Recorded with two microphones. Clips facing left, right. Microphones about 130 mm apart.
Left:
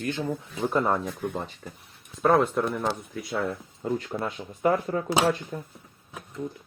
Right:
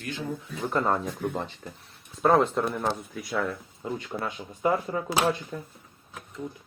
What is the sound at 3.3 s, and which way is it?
Speech, 35° left (ahead or behind).